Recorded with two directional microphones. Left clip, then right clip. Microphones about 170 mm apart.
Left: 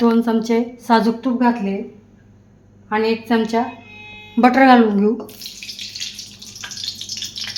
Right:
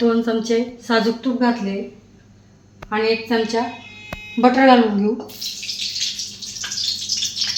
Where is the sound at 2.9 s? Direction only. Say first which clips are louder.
Left 1 dB; 70° left (ahead or behind).